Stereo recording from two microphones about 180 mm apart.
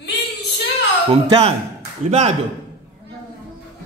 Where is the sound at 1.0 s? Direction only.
30° right (ahead or behind).